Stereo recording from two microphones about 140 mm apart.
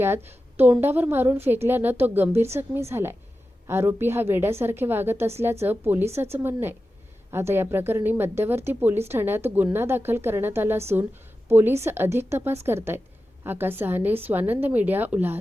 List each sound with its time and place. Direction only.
0.0 s speech: 15° right (ahead or behind)